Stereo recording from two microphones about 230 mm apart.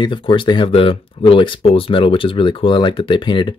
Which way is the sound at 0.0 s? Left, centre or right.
Left.